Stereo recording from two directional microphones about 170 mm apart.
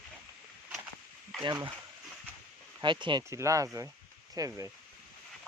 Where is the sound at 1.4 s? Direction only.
25° right (ahead or behind).